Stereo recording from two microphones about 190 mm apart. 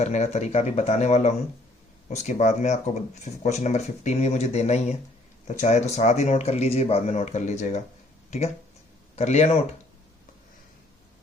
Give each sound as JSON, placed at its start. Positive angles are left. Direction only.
{"t": 0.0, "sound": "speech", "side_deg": 35}
{"t": 9.1, "sound": "speech", "side_deg": 35}